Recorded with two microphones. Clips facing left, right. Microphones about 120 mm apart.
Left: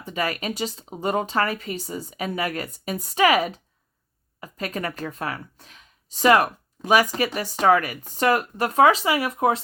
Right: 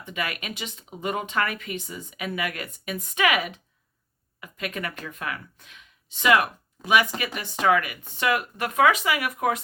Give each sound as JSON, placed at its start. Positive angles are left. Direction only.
{"t": 0.0, "sound": "speech", "side_deg": 35}